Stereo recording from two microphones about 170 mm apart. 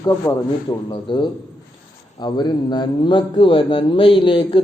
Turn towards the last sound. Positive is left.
turn(degrees=30)  # may be behind; listen again after turning